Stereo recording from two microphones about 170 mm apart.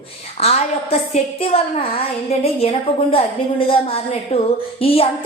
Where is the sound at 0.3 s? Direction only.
35° left (ahead or behind).